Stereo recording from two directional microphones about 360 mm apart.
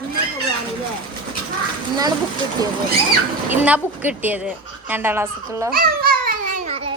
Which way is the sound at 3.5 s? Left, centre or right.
Centre.